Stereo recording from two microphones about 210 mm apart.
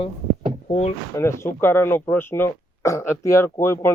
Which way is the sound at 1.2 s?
15° left (ahead or behind).